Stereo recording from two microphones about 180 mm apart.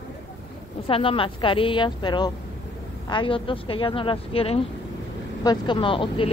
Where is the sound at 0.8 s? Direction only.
30° left (ahead or behind).